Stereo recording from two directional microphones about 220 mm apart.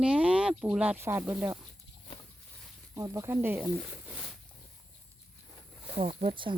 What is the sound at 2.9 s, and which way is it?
Speech, 15° right (ahead or behind).